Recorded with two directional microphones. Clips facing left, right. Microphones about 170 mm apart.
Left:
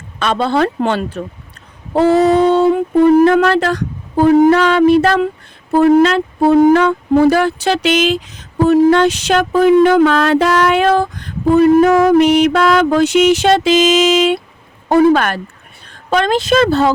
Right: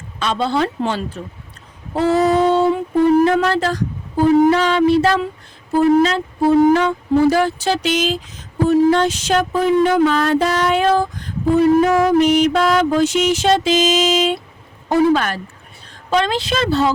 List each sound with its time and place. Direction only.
0.2 s speech: 60° left (ahead or behind)
1.9 s female singing: 65° left (ahead or behind)
3.2 s speech: 65° left (ahead or behind)
14.8 s a woman's voice: 60° left (ahead or behind)